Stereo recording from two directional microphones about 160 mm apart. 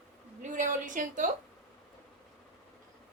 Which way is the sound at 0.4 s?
55° right (ahead or behind).